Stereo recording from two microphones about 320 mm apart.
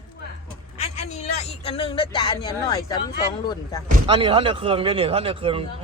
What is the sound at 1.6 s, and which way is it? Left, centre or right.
Speech, centre.